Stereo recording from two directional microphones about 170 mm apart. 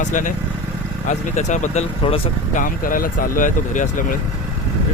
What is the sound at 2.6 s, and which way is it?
Speech, 55° left (ahead or behind).